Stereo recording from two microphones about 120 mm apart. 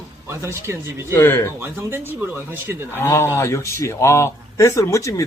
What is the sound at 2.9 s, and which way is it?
A man's voice, 25° left (ahead or behind).